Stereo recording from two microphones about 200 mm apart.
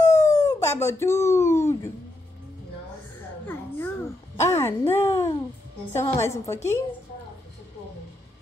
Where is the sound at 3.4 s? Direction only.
10° left (ahead or behind).